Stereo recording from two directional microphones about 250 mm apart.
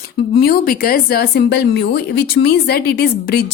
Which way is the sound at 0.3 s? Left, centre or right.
Left.